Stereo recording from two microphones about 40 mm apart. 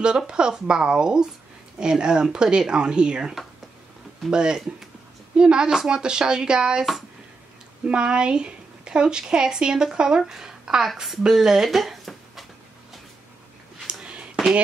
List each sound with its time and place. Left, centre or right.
0.3 s speech: right
4.3 s speech: centre
13.8 s a sound: right